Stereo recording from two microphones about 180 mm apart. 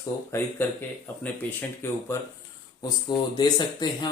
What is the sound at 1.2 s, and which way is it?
Speech, 10° left (ahead or behind).